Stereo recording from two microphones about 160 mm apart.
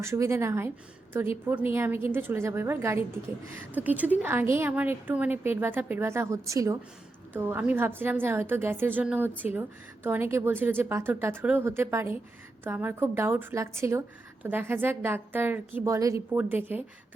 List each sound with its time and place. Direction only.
0.0 s a woman's voice: 15° right (ahead or behind)